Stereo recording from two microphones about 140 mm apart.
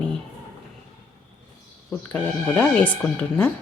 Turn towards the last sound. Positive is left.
turn(degrees=10)  # may be behind; listen again after turning